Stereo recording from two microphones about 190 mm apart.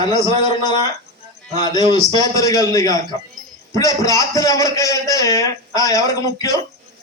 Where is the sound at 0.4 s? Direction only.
20° left (ahead or behind).